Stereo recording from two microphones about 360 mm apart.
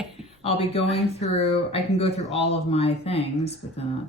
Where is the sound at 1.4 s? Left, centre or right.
Centre.